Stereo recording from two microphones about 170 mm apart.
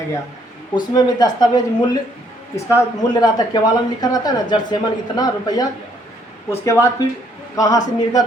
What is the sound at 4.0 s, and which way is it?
A man's voice, 25° left (ahead or behind).